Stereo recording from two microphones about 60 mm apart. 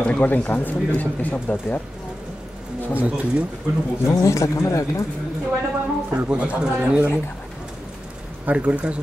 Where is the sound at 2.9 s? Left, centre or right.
Right.